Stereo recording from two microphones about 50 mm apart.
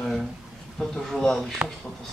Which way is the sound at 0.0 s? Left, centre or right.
Centre.